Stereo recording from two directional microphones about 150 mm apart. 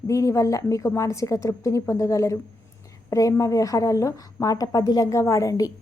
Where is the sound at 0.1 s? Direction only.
20° left (ahead or behind).